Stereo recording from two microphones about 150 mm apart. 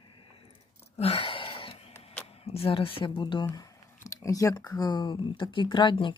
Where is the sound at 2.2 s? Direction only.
40° left (ahead or behind).